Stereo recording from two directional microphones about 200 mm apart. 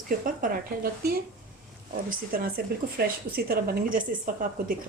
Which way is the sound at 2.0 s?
45° right (ahead or behind).